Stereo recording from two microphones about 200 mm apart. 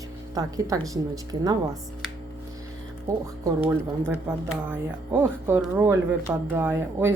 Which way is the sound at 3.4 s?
10° right (ahead or behind).